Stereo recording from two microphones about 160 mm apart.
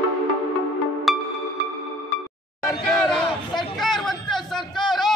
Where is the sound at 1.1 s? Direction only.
Centre (ahead or behind).